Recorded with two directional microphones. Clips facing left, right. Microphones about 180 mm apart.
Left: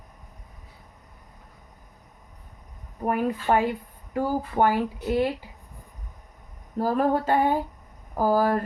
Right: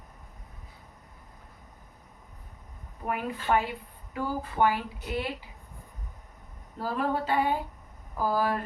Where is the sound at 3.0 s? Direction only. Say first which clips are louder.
Left 6 dB; 45° left (ahead or behind).